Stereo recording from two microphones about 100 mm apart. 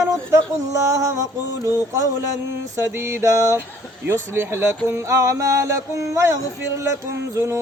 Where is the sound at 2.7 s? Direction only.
25° right (ahead or behind).